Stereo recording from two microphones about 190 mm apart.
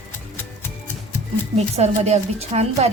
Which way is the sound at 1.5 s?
35° right (ahead or behind).